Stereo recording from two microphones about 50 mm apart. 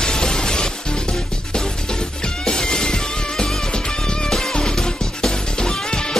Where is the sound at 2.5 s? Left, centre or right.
Centre.